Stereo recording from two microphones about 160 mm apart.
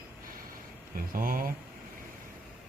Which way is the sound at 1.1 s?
65° right (ahead or behind).